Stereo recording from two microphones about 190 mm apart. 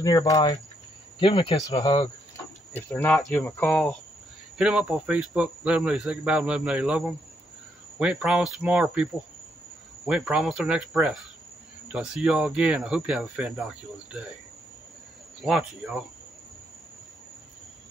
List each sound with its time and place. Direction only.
0.0 s speech: 20° left (ahead or behind)
2.7 s speech: 10° left (ahead or behind)
15.4 s speech: centre (ahead or behind)